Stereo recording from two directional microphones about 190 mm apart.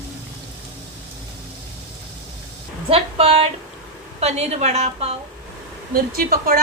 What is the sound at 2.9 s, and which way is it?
A woman's voice, 30° right (ahead or behind).